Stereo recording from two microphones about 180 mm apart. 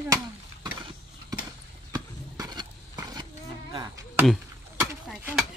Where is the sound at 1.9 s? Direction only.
20° right (ahead or behind).